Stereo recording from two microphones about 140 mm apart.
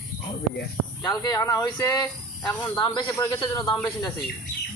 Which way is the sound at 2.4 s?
10° left (ahead or behind).